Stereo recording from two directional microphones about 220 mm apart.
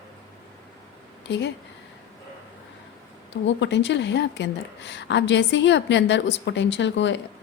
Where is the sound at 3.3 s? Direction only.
55° left (ahead or behind).